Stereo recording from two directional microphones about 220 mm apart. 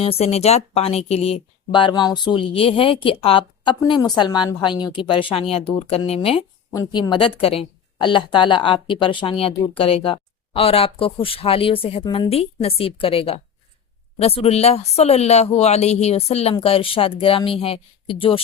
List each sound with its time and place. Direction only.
0.0 s speech: 25° left (ahead or behind)